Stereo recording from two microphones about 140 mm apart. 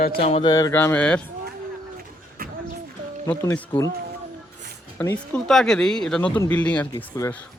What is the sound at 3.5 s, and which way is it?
Speech, 10° left (ahead or behind).